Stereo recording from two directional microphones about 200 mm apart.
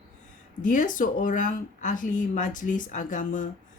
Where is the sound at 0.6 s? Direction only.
40° left (ahead or behind).